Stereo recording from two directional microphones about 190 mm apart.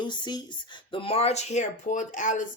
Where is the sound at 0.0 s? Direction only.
20° left (ahead or behind).